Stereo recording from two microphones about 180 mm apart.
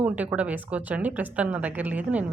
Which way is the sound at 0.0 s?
10° right (ahead or behind).